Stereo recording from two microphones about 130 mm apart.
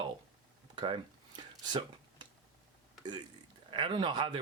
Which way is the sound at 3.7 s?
40° right (ahead or behind).